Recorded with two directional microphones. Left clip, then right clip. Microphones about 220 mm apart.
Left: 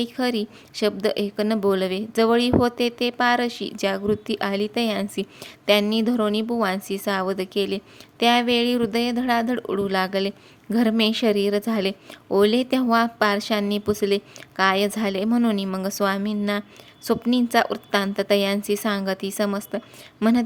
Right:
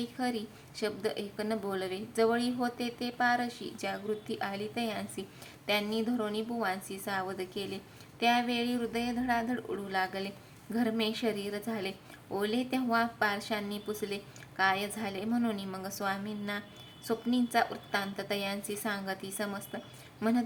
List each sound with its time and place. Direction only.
0.0 s speech: 40° left (ahead or behind)